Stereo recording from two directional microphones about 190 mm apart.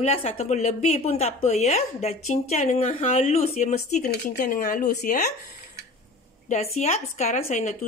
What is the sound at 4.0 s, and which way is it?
Speech, 50° left (ahead or behind).